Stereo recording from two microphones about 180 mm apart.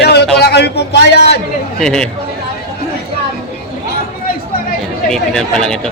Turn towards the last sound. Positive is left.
turn(degrees=5)  # may be behind; listen again after turning